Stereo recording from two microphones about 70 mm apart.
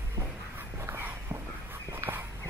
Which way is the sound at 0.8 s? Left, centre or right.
Right.